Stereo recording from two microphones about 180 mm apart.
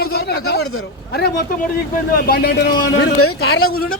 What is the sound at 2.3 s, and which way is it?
Speech, 55° left (ahead or behind).